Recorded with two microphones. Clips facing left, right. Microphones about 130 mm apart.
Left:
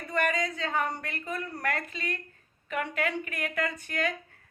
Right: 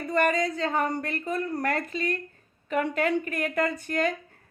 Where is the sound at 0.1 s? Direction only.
35° right (ahead or behind).